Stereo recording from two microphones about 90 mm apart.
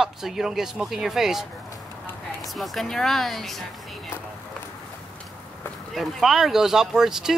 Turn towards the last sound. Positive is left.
turn(degrees=-5)  # may be behind; listen again after turning